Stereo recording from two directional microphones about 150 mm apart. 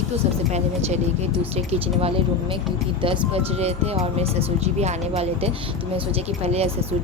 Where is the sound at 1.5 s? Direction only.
40° right (ahead or behind).